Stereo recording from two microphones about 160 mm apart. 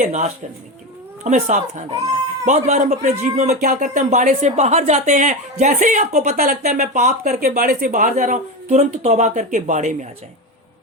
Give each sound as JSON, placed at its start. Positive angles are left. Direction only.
{"t": 0.0, "sound": "speech", "side_deg": -45}
{"t": 6.6, "sound": "speech", "side_deg": -50}